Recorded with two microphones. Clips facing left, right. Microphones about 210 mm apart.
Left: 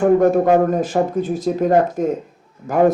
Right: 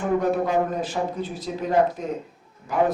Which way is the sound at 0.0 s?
50° left (ahead or behind).